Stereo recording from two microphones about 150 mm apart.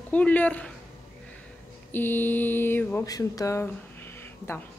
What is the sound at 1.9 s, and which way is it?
Speech, 15° left (ahead or behind).